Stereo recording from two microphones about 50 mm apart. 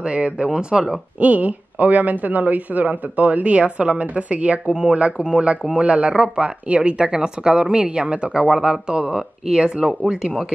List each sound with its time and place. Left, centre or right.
0.0 s a woman's voice: right
1.2 s a woman's voice: right; by 10.3 s centre